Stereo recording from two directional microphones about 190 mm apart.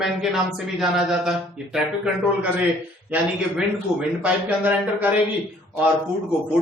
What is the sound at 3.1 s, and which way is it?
A man's voice, 5° right (ahead or behind).